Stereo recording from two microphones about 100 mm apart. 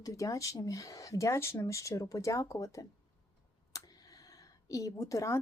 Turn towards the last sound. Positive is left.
turn(degrees=30)  # may be behind; listen again after turning